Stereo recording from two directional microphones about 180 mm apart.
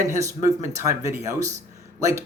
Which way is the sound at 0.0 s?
15° right (ahead or behind).